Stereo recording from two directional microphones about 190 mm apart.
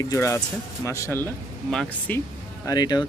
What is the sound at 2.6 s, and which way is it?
Speech, 20° left (ahead or behind).